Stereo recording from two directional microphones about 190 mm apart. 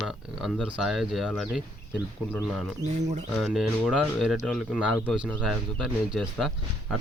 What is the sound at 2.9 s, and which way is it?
Speech, 40° right (ahead or behind).